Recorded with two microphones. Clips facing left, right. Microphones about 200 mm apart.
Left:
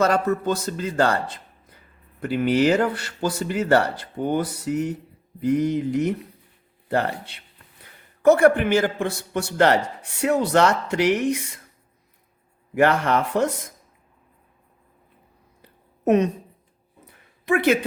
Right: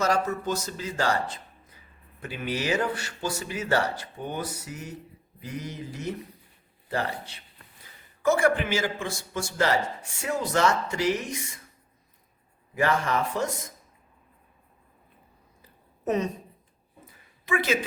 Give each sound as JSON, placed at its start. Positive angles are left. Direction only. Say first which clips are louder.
{"t": 0.1, "sound": "a man's voice", "louder": "left 5 dB", "side_deg": 55}
{"t": 2.2, "sound": "a man's voice", "louder": "left 11 dB", "side_deg": 65}
{"t": 12.7, "sound": "a man's voice", "louder": "left 6 dB", "side_deg": 65}
{"t": 15.6, "sound": "a sound", "louder": "left 8 dB", "side_deg": 65}